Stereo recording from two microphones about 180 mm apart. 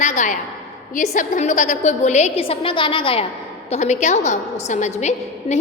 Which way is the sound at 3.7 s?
40° left (ahead or behind).